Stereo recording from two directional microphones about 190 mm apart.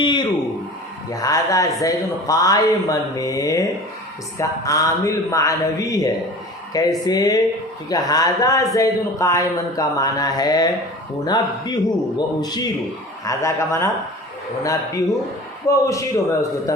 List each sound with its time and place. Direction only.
0.0 s a sound: 25° left (ahead or behind)
1.8 s speech: 20° left (ahead or behind)
15.6 s speech: 15° left (ahead or behind)